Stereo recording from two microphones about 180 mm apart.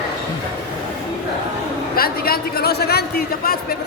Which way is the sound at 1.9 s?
55° left (ahead or behind).